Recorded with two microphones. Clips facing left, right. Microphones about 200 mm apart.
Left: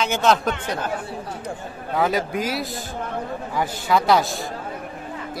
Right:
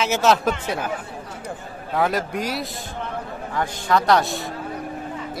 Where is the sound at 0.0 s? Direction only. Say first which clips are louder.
Right 1 dB; 5° right (ahead or behind).